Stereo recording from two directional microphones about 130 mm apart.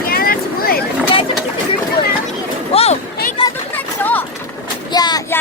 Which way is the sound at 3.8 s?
15° left (ahead or behind).